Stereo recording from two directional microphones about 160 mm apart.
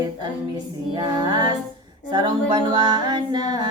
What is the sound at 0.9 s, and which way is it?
Speech, 30° right (ahead or behind).